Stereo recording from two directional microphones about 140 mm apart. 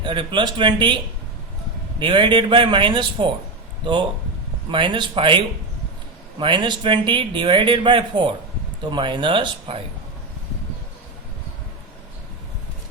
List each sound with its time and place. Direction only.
0.0 s speech: 35° right (ahead or behind)
2.0 s speech: 35° right (ahead or behind)
4.7 s speech: 35° right (ahead or behind)
6.4 s speech: 35° right (ahead or behind)